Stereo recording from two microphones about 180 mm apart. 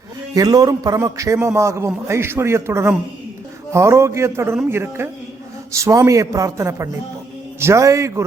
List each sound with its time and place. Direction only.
0.3 s a man's voice: 20° right (ahead or behind)